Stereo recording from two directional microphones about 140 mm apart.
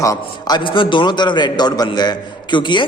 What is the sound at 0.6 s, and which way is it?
A man's voice, 35° left (ahead or behind).